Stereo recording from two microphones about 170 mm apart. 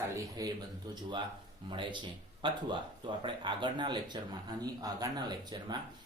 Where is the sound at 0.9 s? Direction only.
25° right (ahead or behind).